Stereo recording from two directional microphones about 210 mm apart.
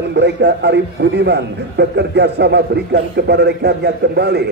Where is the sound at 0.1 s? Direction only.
55° right (ahead or behind).